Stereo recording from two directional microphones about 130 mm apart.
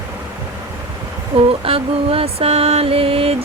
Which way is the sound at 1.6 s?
50° right (ahead or behind).